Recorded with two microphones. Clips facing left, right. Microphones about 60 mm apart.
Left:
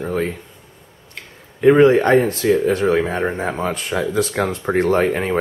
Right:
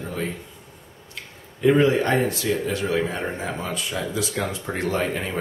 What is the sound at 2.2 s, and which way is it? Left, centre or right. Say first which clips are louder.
Speech: left 7 dB; left.